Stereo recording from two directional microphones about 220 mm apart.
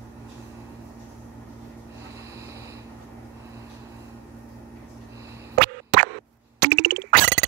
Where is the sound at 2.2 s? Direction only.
15° right (ahead or behind).